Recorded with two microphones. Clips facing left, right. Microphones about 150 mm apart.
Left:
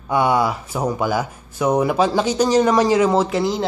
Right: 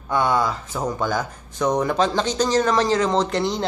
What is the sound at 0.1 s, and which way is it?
Speech, 10° left (ahead or behind).